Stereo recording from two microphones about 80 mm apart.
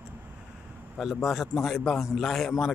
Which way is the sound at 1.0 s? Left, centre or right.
Centre.